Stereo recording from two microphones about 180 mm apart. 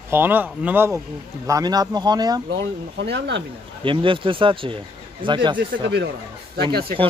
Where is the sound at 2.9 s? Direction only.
75° right (ahead or behind).